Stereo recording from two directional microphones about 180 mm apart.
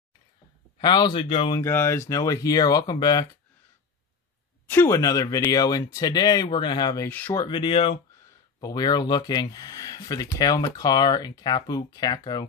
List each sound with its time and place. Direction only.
0.7 s speech: 25° left (ahead or behind)
1.6 s speech: 15° left (ahead or behind)
4.6 s speech: 15° left (ahead or behind)
7.1 s speech: 10° left (ahead or behind)
7.4 s speech: 25° left (ahead or behind)